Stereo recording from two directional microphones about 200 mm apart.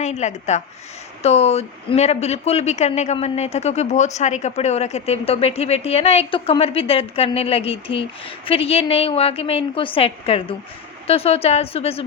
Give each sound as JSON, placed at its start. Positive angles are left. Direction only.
{"t": 0.0, "sound": "a woman's voice", "side_deg": 35}